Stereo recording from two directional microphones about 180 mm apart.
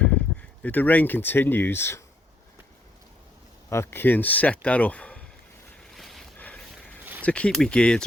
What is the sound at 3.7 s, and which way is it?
Speech, 15° left (ahead or behind).